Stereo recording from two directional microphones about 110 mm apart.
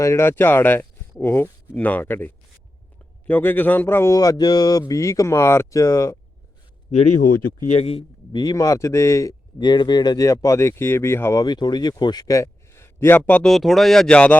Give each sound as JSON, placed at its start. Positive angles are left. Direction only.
{"t": 0.0, "sound": "speech", "side_deg": 25}
{"t": 7.7, "sound": "speech", "side_deg": 65}
{"t": 8.3, "sound": "speech", "side_deg": 40}
{"t": 9.6, "sound": "speech", "side_deg": 40}
{"t": 11.4, "sound": "speech", "side_deg": 40}
{"t": 13.5, "sound": "speech", "side_deg": 0}